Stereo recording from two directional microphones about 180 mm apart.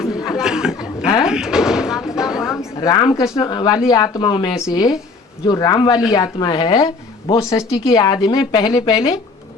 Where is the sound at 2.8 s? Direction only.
25° left (ahead or behind).